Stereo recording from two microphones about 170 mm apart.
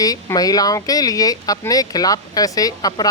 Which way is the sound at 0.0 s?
20° left (ahead or behind).